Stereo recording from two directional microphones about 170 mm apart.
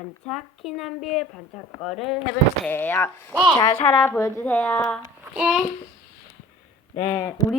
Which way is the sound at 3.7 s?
35° left (ahead or behind).